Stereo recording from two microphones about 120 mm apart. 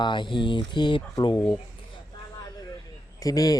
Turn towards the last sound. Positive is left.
turn(degrees=30)  # may be behind; listen again after turning